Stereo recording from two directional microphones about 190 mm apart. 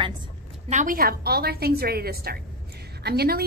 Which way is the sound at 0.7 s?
45° right (ahead or behind).